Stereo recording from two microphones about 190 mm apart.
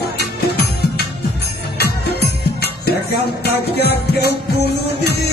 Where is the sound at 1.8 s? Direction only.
60° left (ahead or behind).